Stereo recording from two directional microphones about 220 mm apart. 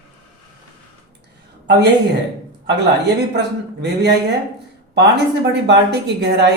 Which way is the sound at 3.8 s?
50° right (ahead or behind).